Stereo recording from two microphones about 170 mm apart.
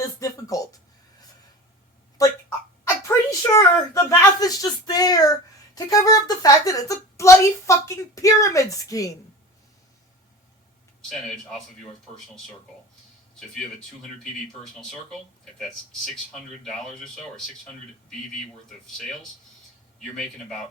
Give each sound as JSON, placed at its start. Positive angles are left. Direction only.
{"t": 0.2, "sound": "music", "side_deg": 20}
{"t": 2.2, "sound": "a sound", "side_deg": 20}
{"t": 5.7, "sound": "a woman's voice", "side_deg": 20}
{"t": 14.6, "sound": "speech", "side_deg": 0}